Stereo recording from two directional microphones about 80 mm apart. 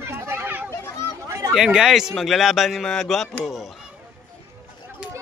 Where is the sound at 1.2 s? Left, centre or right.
Right.